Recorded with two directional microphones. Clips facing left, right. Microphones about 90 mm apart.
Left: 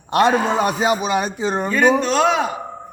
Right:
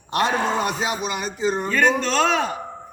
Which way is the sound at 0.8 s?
55° left (ahead or behind).